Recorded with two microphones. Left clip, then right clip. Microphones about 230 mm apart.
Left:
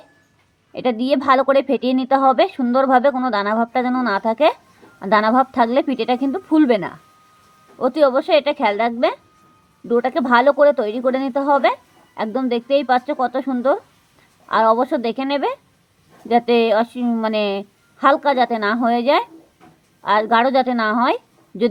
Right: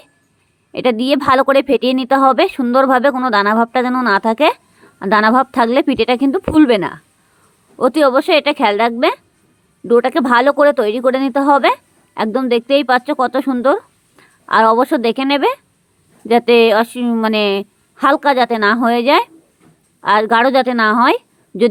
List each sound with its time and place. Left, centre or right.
0.7 s a woman's voice: right